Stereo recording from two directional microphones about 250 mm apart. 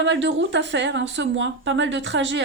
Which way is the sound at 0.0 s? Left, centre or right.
Right.